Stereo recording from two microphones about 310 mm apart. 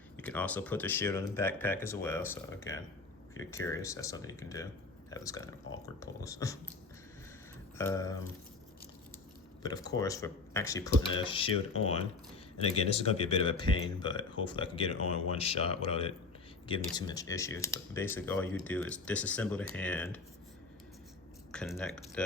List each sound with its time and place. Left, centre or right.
0.2 s speech: centre
7.8 s speech: centre
9.6 s speech: centre
21.5 s speech: centre